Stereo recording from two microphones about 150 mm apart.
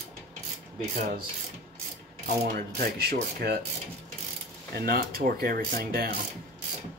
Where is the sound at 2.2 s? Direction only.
85° right.